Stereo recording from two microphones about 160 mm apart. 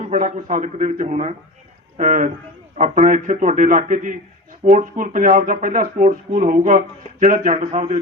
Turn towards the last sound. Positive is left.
turn(degrees=-50)  # may be behind; listen again after turning